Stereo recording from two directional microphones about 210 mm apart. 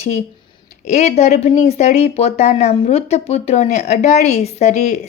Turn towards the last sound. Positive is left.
turn(degrees=35)  # may be behind; listen again after turning